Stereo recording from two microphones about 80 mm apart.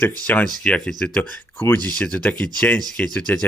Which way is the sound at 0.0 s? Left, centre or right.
Left.